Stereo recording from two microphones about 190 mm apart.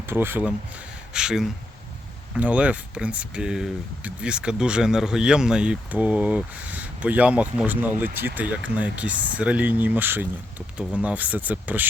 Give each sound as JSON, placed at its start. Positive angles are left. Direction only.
{"t": 0.0, "sound": "speech", "side_deg": -10}